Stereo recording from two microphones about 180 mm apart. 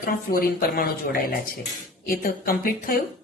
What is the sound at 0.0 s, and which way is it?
A woman's voice, 55° left (ahead or behind).